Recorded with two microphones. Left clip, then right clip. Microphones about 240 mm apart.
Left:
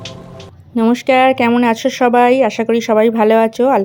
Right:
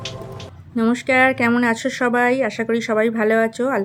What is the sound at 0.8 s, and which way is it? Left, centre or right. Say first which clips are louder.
Speech: left 5 dB; centre.